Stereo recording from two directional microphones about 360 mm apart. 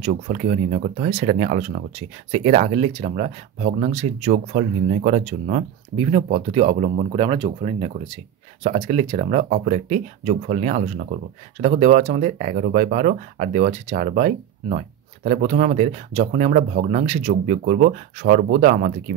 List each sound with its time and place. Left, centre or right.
0.0 s speech: centre